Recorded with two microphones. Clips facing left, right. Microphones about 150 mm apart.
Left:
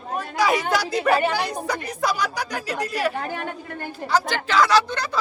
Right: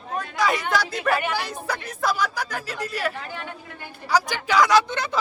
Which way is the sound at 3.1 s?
50° left (ahead or behind).